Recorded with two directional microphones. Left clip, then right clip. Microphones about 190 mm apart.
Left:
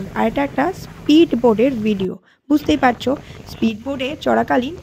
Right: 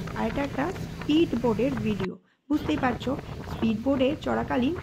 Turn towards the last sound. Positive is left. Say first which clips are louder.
# left 11 dB
turn(degrees=35)  # may be behind; listen again after turning